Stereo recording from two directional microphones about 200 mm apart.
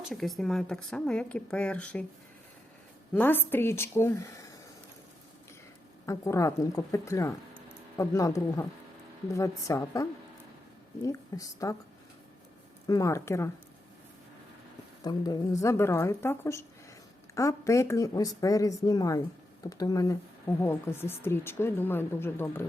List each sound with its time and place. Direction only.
0.1 s a woman's voice: centre (ahead or behind)
3.2 s a woman's voice: 10° left (ahead or behind)
6.1 s a woman's voice: 15° left (ahead or behind)
12.9 s a woman's voice: 15° left (ahead or behind)
15.0 s a woman's voice: 20° left (ahead or behind)